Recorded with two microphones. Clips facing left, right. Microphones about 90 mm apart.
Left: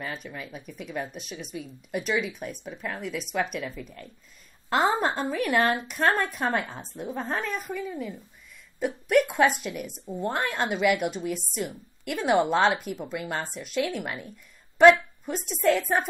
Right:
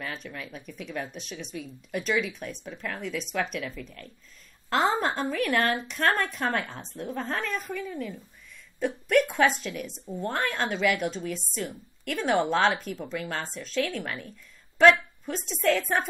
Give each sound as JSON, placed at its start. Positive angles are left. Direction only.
{"t": 0.0, "sound": "a woman's voice", "side_deg": 5}
{"t": 6.7, "sound": "speech", "side_deg": 5}
{"t": 7.9, "sound": "a woman's voice", "side_deg": 15}